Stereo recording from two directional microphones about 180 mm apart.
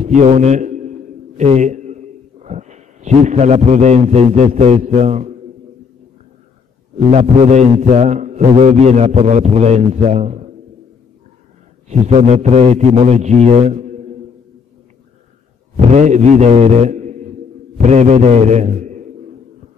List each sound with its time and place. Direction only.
0.0 s a man's voice: 40° right (ahead or behind)
7.1 s a man's voice: 40° right (ahead or behind)
11.9 s a man's voice: 35° right (ahead or behind)
15.7 s a man's voice: 40° right (ahead or behind)